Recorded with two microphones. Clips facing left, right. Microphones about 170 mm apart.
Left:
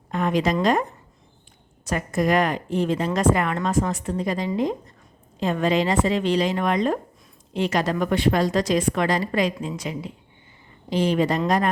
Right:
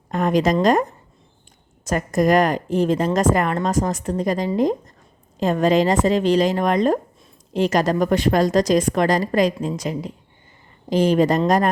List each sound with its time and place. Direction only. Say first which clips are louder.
0.1 s a woman's voice: right 4 dB; 40° right (ahead or behind)